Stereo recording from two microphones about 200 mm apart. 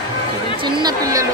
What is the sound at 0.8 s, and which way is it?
Speech, 20° right (ahead or behind).